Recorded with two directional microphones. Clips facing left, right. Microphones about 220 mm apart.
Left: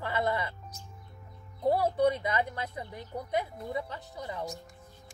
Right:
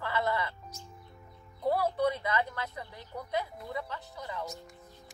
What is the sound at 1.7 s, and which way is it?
Speech, 20° left (ahead or behind).